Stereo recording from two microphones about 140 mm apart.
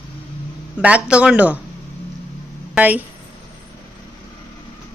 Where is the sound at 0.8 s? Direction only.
10° right (ahead or behind).